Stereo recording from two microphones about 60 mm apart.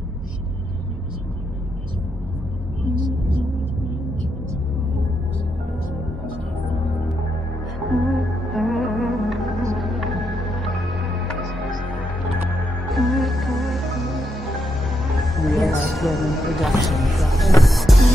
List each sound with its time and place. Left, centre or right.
7.9 s music: centre
12.9 s music: centre